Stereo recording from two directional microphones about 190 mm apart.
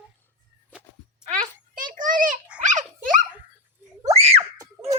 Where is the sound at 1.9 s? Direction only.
45° right (ahead or behind).